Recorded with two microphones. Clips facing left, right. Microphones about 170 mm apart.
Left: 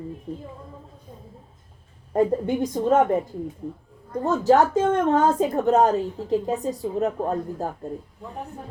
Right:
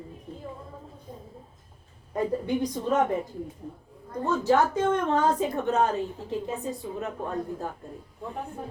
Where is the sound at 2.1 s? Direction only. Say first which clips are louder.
Left 6 dB; 50° left (ahead or behind).